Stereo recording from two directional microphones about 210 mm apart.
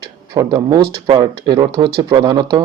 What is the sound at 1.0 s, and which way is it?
Speech, 20° right (ahead or behind).